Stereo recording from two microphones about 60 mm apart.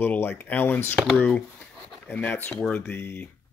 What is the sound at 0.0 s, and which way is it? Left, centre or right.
Speech, left.